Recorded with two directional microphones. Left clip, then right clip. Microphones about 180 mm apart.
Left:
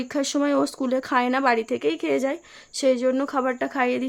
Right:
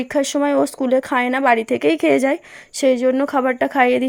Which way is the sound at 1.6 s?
30° right (ahead or behind).